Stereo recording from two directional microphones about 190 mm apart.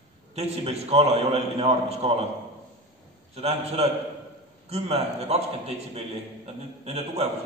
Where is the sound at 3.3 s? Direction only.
35° right (ahead or behind).